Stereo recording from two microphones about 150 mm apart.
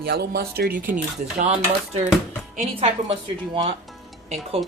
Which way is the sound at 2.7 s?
40° right (ahead or behind).